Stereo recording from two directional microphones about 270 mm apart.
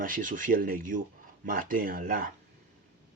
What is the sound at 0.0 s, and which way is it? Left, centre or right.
Speech, right.